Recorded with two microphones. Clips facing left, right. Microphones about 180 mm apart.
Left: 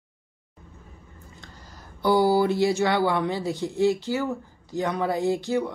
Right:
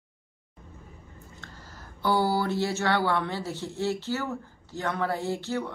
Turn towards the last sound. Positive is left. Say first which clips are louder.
# left 6 dB
turn(degrees=15)  # may be behind; listen again after turning